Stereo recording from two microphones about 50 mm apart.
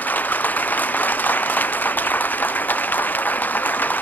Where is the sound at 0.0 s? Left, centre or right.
Left.